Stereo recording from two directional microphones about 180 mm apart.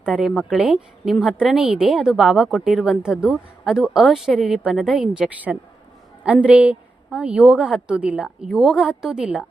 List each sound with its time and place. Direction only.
0.0 s a woman's voice: centre (ahead or behind)